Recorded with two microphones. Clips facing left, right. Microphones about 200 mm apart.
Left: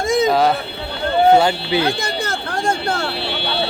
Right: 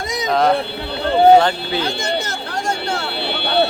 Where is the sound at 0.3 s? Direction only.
5° left (ahead or behind).